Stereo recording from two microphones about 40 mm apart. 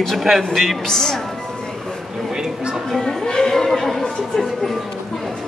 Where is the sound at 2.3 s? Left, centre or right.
Centre.